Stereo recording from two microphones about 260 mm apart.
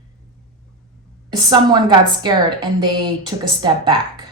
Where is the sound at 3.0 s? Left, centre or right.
Centre.